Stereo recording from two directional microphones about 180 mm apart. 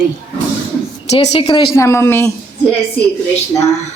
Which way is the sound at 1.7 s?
15° left (ahead or behind).